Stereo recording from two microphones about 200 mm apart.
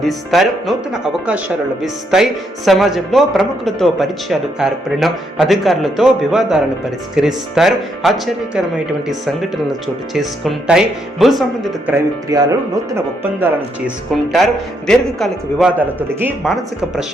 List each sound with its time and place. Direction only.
0.0 s speech: centre (ahead or behind)
9.8 s speech: centre (ahead or behind)
11.9 s speech: 15° right (ahead or behind)
13.4 s speech: 5° right (ahead or behind)